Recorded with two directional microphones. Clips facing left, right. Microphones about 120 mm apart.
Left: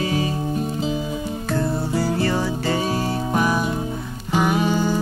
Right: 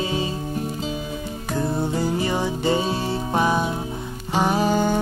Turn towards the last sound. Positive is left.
turn(degrees=-45)  # may be behind; listen again after turning